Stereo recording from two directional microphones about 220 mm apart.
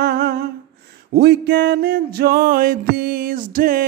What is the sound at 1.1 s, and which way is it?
Music, 45° right (ahead or behind).